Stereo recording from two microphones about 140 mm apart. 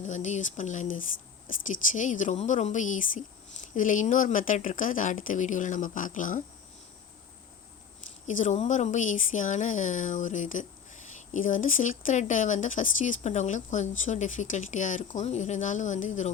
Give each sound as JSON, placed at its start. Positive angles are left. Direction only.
{"t": 0.0, "sound": "speech", "side_deg": 60}
{"t": 1.9, "sound": "speech", "side_deg": 65}
{"t": 8.3, "sound": "speech", "side_deg": 65}